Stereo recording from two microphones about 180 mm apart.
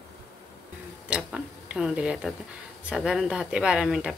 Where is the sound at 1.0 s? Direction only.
5° right (ahead or behind).